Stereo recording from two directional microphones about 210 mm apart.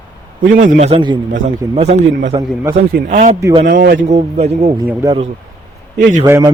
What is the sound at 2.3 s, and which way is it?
Speech, 20° right (ahead or behind).